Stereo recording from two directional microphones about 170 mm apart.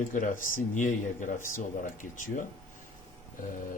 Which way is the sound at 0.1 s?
50° left (ahead or behind).